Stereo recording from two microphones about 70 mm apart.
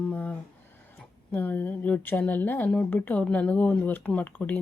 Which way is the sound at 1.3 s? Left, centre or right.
Left.